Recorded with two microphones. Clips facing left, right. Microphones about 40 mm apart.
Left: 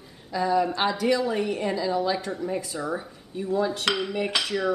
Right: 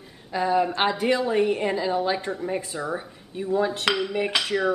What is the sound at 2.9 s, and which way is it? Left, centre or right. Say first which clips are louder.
Speech: right 1 dB; centre.